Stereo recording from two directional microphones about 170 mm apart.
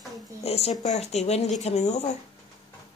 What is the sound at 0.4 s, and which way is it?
Speech, 35° left (ahead or behind).